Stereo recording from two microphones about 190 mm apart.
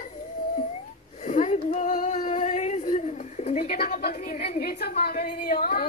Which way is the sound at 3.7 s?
55° left (ahead or behind).